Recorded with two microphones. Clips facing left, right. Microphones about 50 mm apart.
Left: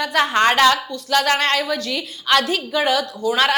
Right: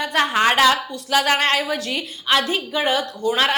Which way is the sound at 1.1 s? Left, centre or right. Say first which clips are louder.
Even; centre.